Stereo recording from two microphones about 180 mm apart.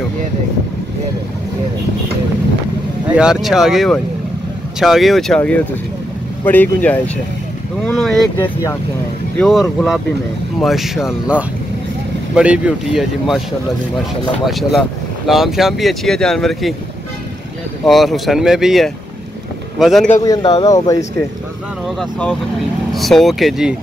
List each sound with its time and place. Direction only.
3.1 s speech: 5° right (ahead or behind)
7.8 s boat: 5° left (ahead or behind)
9.4 s speech: centre (ahead or behind)
14.4 s speech: centre (ahead or behind)
17.8 s speech: centre (ahead or behind)
20.6 s speech: 20° left (ahead or behind)
21.8 s speech: centre (ahead or behind)